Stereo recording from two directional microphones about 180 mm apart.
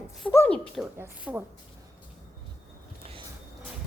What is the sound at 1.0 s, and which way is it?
Speech, 10° right (ahead or behind).